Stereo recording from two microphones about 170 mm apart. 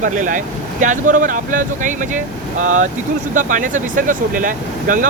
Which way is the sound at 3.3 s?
50° right (ahead or behind).